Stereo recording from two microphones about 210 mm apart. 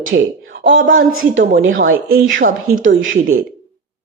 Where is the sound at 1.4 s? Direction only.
40° right (ahead or behind).